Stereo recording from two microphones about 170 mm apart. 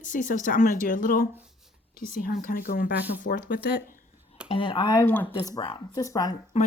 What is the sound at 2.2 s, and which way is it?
Speech, 55° left (ahead or behind).